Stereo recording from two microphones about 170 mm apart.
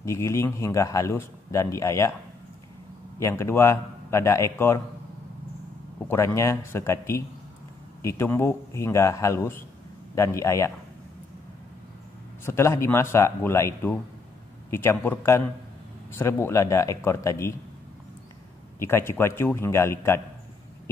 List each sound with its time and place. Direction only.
0.0 s a man's voice: 15° left (ahead or behind)
3.2 s a man's voice: 15° left (ahead or behind)
6.0 s a man's voice: 15° left (ahead or behind)
12.4 s a man's voice: 15° left (ahead or behind)
18.8 s a man's voice: 15° left (ahead or behind)